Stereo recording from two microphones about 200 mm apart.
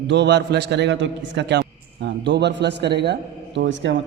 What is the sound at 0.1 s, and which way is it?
A man's voice, 60° right (ahead or behind).